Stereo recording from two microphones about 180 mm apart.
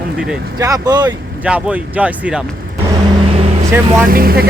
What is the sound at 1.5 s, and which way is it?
Speech, 5° right (ahead or behind).